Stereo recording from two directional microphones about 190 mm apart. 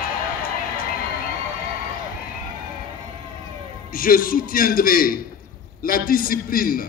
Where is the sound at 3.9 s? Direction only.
50° left (ahead or behind).